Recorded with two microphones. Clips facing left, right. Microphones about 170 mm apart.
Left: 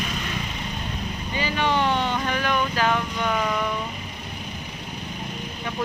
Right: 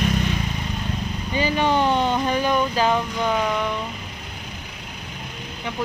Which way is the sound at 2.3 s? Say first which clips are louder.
Right 4 dB; 20° right (ahead or behind).